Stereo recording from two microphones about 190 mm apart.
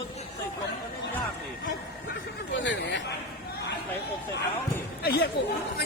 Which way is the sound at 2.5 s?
70° left (ahead or behind).